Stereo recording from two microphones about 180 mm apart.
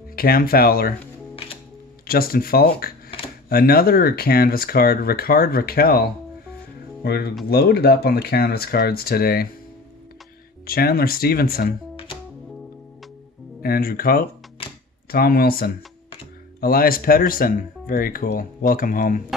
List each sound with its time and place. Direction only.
0.1 s speech: 55° left (ahead or behind)
2.0 s speech: 55° left (ahead or behind)
10.7 s speech: 55° left (ahead or behind)
13.6 s speech: 55° left (ahead or behind)